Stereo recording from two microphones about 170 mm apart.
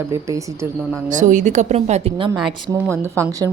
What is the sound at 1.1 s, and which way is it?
A woman's voice, 45° right (ahead or behind).